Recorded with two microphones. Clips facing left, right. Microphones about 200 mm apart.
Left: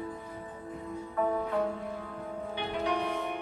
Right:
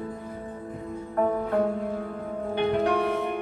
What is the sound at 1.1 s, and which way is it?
Music, 55° right (ahead or behind).